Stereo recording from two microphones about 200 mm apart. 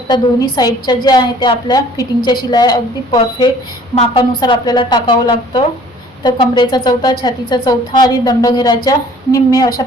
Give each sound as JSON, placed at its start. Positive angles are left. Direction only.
{"t": 0.1, "sound": "a woman's voice", "side_deg": 20}